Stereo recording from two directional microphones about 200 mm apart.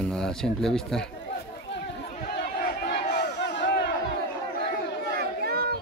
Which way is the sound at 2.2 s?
50° left (ahead or behind).